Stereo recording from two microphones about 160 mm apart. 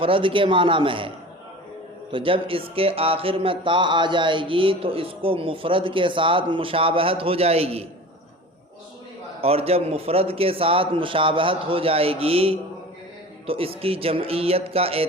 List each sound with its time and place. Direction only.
0.0 s speech: 35° right (ahead or behind)
2.1 s speech: 35° right (ahead or behind)
9.4 s speech: 40° right (ahead or behind)